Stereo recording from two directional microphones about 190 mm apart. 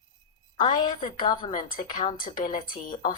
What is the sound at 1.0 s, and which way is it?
Speech, 45° left (ahead or behind).